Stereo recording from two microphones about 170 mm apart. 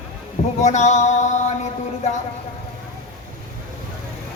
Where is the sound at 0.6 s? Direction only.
45° left (ahead or behind).